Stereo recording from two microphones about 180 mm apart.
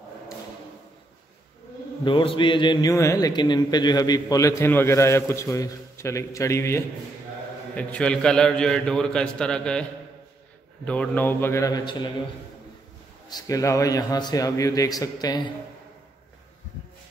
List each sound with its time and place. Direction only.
2.0 s a man's voice: 25° left (ahead or behind); by 9.8 s 5° left (ahead or behind)
10.9 s a man's voice: 10° left (ahead or behind); by 12.1 s 25° left (ahead or behind)
13.3 s a man's voice: 20° left (ahead or behind)